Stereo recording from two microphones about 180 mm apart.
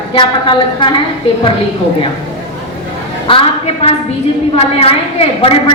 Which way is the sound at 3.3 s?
30° left (ahead or behind).